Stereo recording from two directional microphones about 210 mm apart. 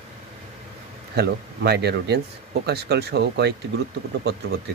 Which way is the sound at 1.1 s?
50° right (ahead or behind).